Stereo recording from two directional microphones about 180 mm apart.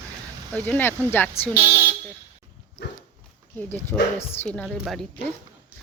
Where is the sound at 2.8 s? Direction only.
70° left (ahead or behind).